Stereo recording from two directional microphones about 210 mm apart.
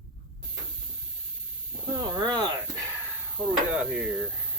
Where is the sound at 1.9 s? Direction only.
20° right (ahead or behind).